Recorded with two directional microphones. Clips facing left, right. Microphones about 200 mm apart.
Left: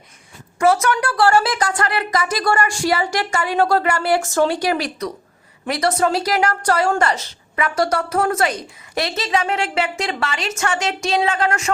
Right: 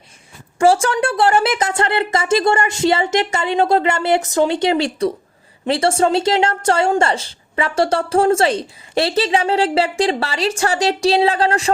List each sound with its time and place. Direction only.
0.6 s a woman's voice: 30° right (ahead or behind)